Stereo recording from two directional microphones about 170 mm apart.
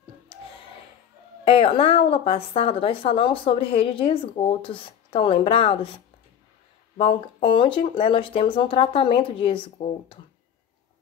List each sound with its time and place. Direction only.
1.4 s a woman's voice: 35° left (ahead or behind)
7.0 s a woman's voice: 35° left (ahead or behind)